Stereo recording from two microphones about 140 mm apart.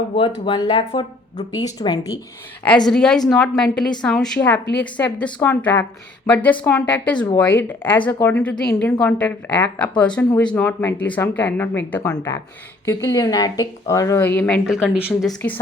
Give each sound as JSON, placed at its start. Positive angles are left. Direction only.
{"t": 0.2, "sound": "speech", "side_deg": 30}
{"t": 2.6, "sound": "a woman's voice", "side_deg": 5}